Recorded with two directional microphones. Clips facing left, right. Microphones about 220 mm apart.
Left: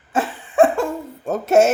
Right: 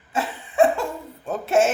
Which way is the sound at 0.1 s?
50° left (ahead or behind).